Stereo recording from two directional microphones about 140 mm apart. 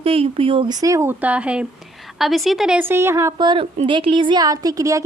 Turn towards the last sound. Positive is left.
turn(degrees=-25)  # may be behind; listen again after turning